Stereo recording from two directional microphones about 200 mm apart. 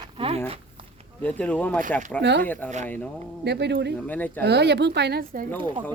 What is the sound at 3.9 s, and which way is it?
Speech, 10° left (ahead or behind).